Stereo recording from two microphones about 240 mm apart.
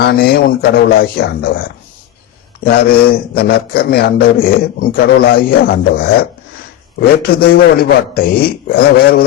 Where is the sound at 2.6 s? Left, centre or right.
Left.